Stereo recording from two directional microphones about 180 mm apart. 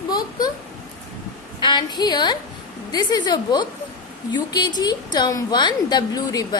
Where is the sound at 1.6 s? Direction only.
25° left (ahead or behind).